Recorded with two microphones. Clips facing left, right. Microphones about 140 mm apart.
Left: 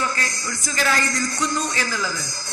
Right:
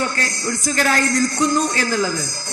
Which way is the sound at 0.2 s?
50° right (ahead or behind).